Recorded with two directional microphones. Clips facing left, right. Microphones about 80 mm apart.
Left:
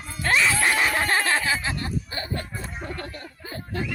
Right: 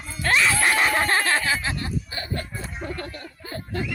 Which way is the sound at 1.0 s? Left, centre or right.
Centre.